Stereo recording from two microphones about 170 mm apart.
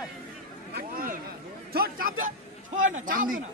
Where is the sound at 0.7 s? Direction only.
60° right (ahead or behind).